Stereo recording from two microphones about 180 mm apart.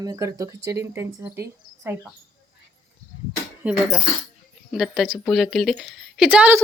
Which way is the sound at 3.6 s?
10° right (ahead or behind).